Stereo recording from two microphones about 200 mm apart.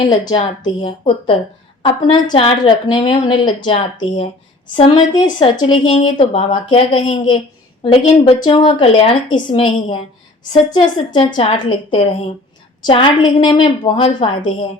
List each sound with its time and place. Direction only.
0.0 s speech: 20° left (ahead or behind)